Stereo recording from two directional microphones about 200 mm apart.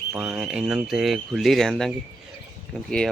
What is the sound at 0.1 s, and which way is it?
Speech, 5° right (ahead or behind).